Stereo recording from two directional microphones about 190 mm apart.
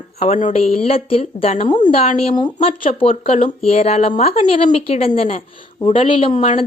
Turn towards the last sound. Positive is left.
turn(degrees=30)  # may be behind; listen again after turning